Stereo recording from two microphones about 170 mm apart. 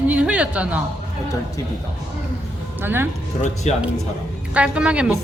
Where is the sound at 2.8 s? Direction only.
10° right (ahead or behind).